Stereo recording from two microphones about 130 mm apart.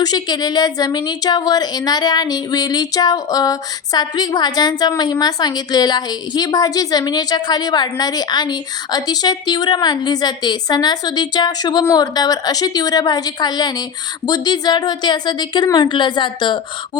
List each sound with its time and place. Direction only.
0.0 s a woman's voice: 30° left (ahead or behind)